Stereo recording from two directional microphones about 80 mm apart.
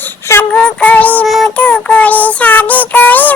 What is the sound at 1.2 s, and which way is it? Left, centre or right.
Child singing, centre.